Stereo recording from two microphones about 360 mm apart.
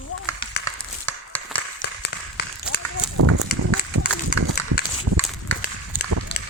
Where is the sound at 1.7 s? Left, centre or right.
Left.